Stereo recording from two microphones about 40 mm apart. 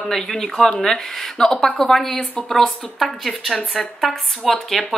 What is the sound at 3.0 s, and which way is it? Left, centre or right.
Speech, centre.